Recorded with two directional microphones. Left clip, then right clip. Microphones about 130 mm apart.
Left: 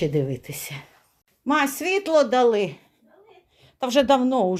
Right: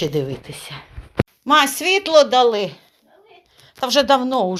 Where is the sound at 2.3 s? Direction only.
25° left (ahead or behind).